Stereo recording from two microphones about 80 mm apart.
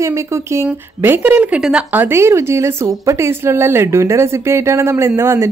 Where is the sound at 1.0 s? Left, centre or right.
Right.